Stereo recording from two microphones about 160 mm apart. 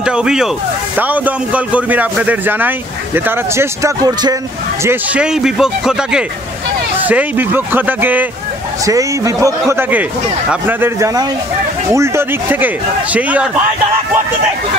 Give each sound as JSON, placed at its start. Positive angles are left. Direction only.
{"t": 0.0, "sound": "a sound", "side_deg": -5}
{"t": 0.9, "sound": "a man's voice", "side_deg": -10}
{"t": 4.8, "sound": "a man's voice", "side_deg": -5}
{"t": 8.8, "sound": "a man's voice", "side_deg": -20}